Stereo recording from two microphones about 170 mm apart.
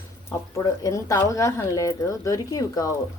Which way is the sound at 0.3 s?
15° left (ahead or behind).